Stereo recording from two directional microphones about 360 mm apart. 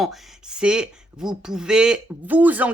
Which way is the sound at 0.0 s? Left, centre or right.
Centre.